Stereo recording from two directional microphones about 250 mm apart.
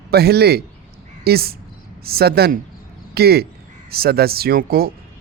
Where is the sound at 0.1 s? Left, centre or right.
Right.